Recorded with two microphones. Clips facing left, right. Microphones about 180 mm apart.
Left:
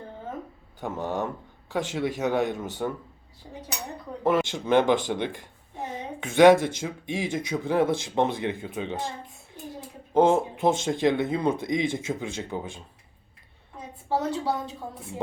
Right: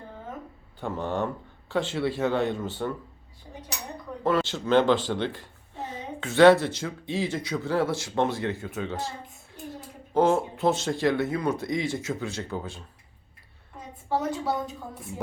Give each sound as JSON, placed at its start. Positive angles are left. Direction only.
{"t": 0.8, "sound": "speech", "side_deg": 10}
{"t": 4.2, "sound": "speech", "side_deg": 15}
{"t": 10.2, "sound": "speech", "side_deg": 15}
{"t": 14.2, "sound": "a woman's voice", "side_deg": 30}